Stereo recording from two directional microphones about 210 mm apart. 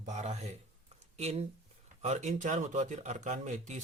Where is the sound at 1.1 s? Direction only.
30° right (ahead or behind).